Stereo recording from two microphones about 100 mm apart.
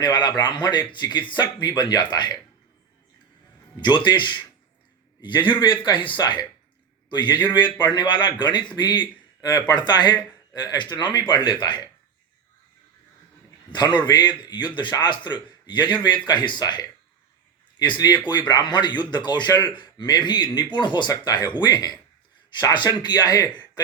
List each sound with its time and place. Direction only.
0.0 s a man's voice: 45° left (ahead or behind)
3.8 s a man's voice: 50° left (ahead or behind)
13.7 s a man's voice: 50° left (ahead or behind)